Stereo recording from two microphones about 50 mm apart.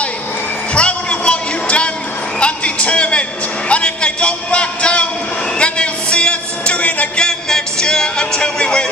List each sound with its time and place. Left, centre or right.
0.7 s music: left
7.2 s music: centre